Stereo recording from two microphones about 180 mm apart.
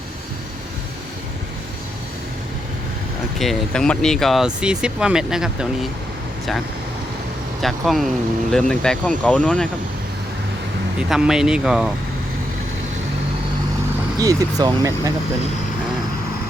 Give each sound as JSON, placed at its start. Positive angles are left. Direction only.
{"t": 3.3, "sound": "speech", "side_deg": 0}
{"t": 7.6, "sound": "speech", "side_deg": 0}
{"t": 11.1, "sound": "speech", "side_deg": -5}
{"t": 14.2, "sound": "speech", "side_deg": -20}